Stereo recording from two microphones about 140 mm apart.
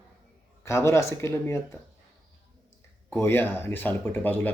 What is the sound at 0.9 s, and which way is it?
Speech, 20° left (ahead or behind).